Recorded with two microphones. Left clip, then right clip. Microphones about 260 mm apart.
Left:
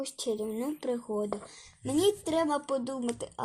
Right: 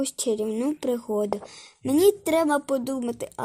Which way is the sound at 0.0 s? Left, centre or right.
Right.